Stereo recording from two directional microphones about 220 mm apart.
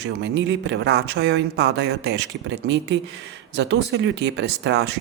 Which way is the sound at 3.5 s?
50° right (ahead or behind).